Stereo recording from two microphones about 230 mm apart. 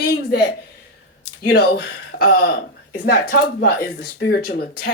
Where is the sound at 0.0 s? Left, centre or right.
Left.